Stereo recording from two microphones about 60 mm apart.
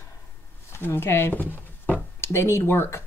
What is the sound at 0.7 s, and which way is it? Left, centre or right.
Speech, left.